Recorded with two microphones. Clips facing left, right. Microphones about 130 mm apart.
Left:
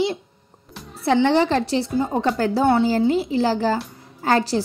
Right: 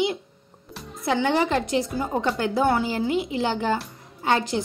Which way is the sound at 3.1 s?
35° left (ahead or behind).